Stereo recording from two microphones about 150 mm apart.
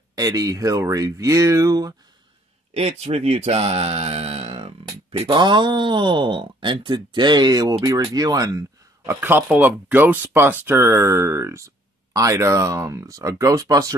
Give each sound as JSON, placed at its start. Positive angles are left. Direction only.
{"t": 0.1, "sound": "speech", "side_deg": -25}
{"t": 2.7, "sound": "speech", "side_deg": -45}
{"t": 9.0, "sound": "speech", "side_deg": -15}